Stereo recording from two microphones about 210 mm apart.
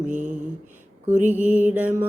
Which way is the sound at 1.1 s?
10° right (ahead or behind).